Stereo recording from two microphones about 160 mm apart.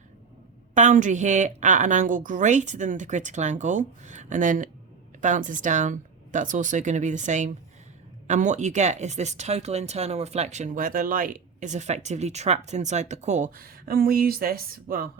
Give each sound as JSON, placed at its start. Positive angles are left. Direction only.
{"t": 0.7, "sound": "speech", "side_deg": -50}